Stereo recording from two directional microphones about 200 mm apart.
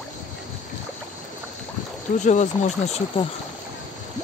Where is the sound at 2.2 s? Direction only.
35° left (ahead or behind).